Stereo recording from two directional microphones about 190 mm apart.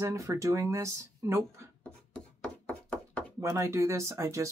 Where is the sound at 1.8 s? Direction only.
5° left (ahead or behind).